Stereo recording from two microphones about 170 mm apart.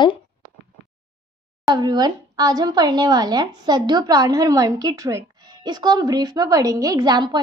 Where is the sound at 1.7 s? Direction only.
25° right (ahead or behind).